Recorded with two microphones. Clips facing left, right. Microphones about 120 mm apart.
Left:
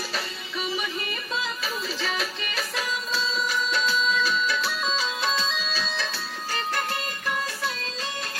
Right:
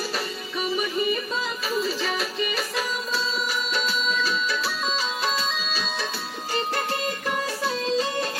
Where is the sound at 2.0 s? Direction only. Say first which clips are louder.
Right 3 dB; 5° right (ahead or behind).